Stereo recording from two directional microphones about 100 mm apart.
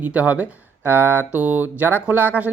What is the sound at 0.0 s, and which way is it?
Speech, 15° right (ahead or behind).